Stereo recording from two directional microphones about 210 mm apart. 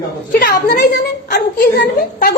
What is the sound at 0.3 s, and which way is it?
A woman's voice, 45° left (ahead or behind).